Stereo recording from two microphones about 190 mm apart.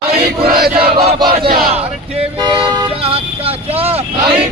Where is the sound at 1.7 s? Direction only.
30° right (ahead or behind).